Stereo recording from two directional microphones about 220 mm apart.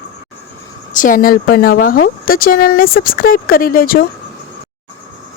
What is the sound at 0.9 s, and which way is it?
Speech, 35° left (ahead or behind).